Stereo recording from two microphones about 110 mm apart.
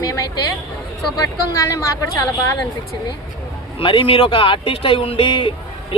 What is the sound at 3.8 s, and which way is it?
Speech, 50° left (ahead or behind).